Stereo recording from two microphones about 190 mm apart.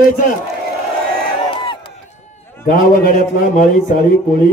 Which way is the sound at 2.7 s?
45° left (ahead or behind).